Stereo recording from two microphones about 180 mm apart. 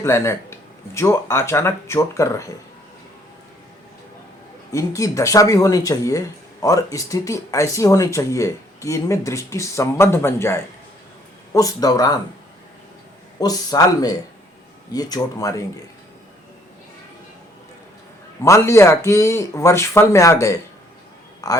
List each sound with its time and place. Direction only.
0.0 s speech: 15° left (ahead or behind)
4.7 s speech: 20° left (ahead or behind)
13.4 s speech: 20° left (ahead or behind)
18.4 s speech: 15° left (ahead or behind)